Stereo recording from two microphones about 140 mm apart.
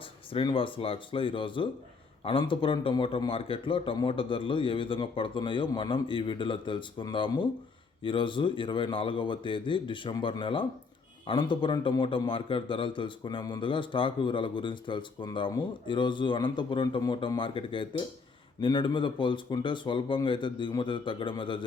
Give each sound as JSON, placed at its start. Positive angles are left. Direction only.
{"t": 0.3, "sound": "a man's voice", "side_deg": 40}